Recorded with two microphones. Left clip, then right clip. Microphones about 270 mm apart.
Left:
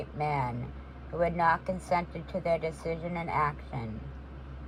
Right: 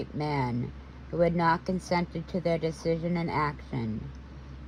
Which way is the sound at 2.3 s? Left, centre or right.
Centre.